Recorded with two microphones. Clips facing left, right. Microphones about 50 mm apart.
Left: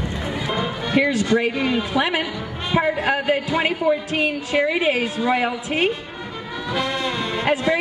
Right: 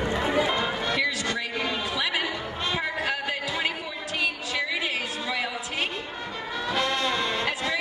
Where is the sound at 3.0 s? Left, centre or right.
Left.